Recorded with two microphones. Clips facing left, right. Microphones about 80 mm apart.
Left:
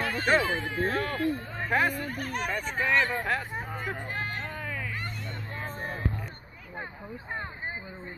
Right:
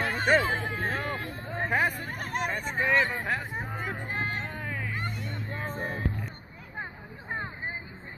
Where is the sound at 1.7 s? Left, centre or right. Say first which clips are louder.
Left 2 dB; centre.